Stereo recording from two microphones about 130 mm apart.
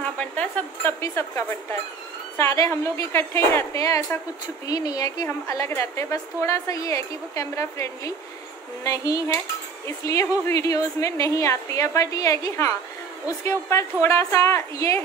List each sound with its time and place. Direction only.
0.2 s a woman's voice: 10° left (ahead or behind)